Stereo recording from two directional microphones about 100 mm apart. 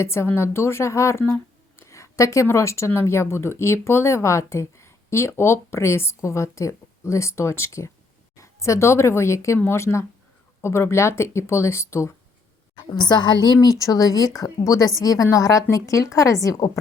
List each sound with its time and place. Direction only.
0.0 s a woman's voice: 25° left (ahead or behind)
12.7 s a woman's voice: 45° left (ahead or behind)